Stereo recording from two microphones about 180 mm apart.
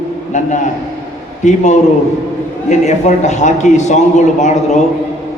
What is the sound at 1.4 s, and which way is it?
A man's voice, 40° left (ahead or behind).